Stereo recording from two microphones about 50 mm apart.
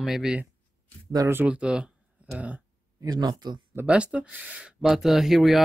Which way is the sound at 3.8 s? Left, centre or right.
Right.